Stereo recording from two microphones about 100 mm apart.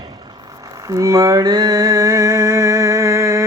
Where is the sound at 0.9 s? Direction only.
35° right (ahead or behind).